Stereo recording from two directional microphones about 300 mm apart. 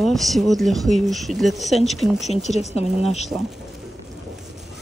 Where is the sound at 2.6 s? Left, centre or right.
Left.